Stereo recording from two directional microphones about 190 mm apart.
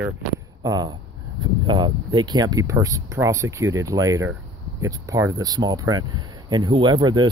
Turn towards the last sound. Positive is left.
turn(degrees=-20)  # may be behind; listen again after turning